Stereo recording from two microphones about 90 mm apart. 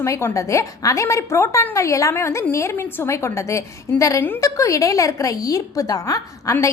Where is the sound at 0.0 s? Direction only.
30° left (ahead or behind).